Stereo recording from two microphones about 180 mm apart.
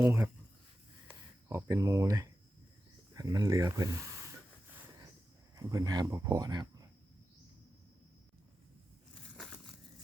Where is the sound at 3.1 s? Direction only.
20° right (ahead or behind).